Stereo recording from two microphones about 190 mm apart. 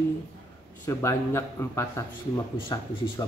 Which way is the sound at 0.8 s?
15° left (ahead or behind).